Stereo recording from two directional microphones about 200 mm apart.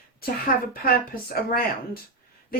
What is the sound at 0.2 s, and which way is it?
Speech, 45° left (ahead or behind).